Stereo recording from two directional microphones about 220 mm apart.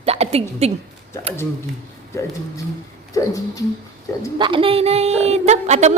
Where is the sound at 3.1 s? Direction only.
15° left (ahead or behind).